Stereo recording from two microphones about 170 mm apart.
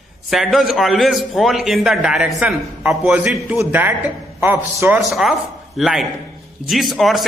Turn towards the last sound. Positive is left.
turn(degrees=0)  # may be behind; listen again after turning